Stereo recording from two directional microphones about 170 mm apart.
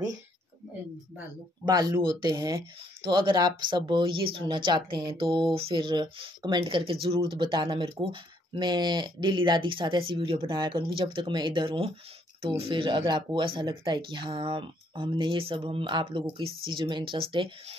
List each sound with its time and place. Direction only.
1.7 s speech: 25° right (ahead or behind)